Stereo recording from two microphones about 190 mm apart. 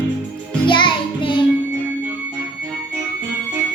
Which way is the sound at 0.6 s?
25° left (ahead or behind).